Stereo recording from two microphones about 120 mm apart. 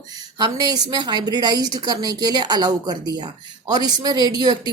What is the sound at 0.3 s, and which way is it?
A woman's voice, 35° right (ahead or behind).